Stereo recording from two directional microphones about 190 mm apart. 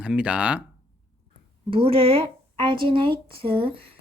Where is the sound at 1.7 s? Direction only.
30° right (ahead or behind).